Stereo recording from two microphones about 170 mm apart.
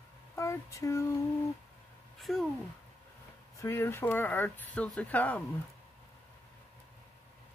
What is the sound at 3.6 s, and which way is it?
Speech, 15° left (ahead or behind).